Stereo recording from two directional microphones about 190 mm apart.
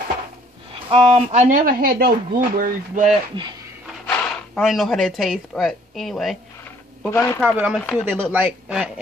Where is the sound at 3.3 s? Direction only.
25° right (ahead or behind).